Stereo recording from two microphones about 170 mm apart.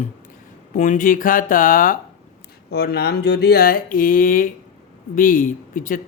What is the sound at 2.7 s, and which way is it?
Speech, 70° left (ahead or behind).